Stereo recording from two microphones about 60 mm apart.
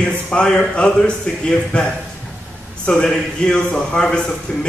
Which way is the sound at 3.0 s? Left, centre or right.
Centre.